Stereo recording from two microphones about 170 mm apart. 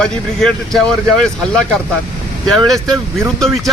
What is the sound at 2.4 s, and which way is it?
Speech, centre (ahead or behind).